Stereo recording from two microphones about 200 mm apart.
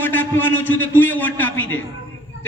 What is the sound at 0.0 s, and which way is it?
A man's voice, 10° left (ahead or behind).